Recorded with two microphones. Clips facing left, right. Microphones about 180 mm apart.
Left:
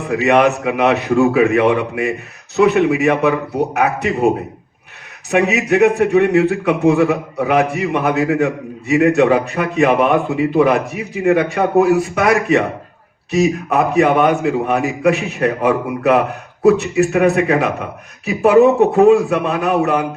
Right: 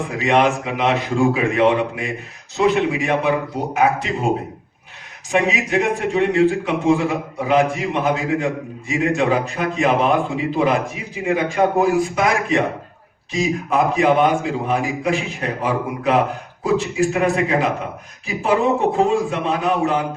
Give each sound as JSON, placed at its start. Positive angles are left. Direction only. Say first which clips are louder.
{"t": 0.1, "sound": "a man's voice", "louder": "left 5 dB", "side_deg": 65}
{"t": 5.3, "sound": "a man's voice", "louder": "left 4 dB", "side_deg": 65}